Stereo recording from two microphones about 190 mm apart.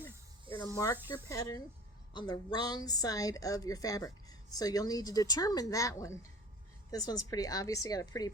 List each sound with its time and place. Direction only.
0.5 s snake: 30° right (ahead or behind)
1.1 s a woman's voice: 15° left (ahead or behind)